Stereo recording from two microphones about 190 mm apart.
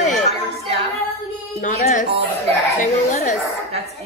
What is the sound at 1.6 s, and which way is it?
Speech, 40° left (ahead or behind).